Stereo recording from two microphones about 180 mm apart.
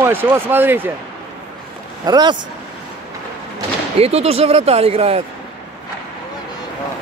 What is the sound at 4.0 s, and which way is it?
Speech, 35° right (ahead or behind).